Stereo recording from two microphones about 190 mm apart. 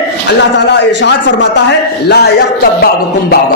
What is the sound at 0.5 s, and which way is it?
A man's voice, 65° left (ahead or behind).